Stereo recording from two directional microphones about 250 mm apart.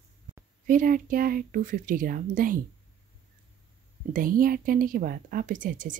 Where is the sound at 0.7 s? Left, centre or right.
Right.